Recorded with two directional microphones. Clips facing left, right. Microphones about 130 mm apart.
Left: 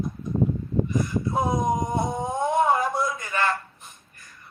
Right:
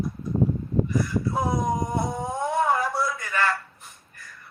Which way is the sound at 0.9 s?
20° left (ahead or behind).